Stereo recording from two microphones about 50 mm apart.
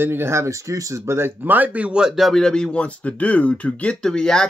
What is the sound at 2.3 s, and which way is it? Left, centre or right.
Speech, centre.